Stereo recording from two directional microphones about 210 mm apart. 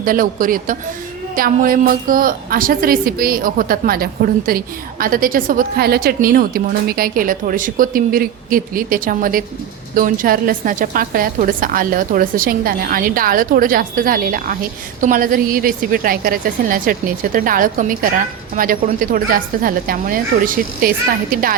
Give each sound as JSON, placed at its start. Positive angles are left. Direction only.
{"t": 0.0, "sound": "a woman's voice", "side_deg": -40}